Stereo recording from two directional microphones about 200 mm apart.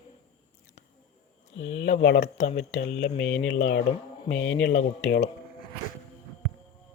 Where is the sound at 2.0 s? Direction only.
60° left (ahead or behind).